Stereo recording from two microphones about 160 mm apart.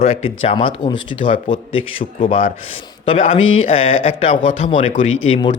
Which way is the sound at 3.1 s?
35° left (ahead or behind).